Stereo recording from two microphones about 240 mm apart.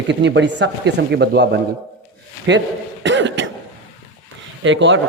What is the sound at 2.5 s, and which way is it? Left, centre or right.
Speech, right.